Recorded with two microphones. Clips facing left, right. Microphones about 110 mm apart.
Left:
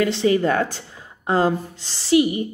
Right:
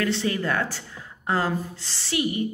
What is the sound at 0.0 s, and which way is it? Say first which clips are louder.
A woman's voice: left 7 dB; 20° left (ahead or behind).